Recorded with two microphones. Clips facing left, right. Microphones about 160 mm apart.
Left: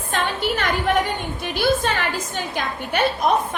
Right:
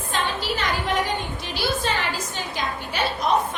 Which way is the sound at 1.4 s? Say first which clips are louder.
Left 7 dB; 55° left (ahead or behind).